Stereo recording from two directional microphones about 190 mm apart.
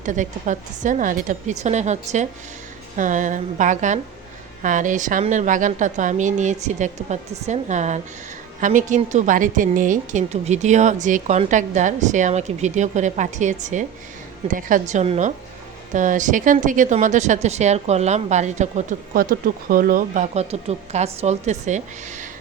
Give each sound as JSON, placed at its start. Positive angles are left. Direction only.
{"t": 0.0, "sound": "a woman's voice", "side_deg": -40}